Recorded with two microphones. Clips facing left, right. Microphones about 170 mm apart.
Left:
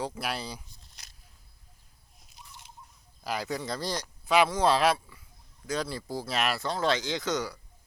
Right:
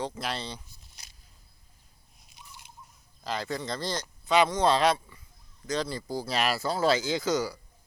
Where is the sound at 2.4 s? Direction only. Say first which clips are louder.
Even; centre (ahead or behind).